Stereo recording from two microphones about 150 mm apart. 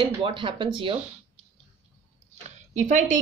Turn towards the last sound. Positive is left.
turn(degrees=-55)  # may be behind; listen again after turning